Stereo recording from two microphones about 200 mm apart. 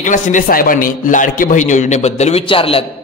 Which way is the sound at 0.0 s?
40° left (ahead or behind).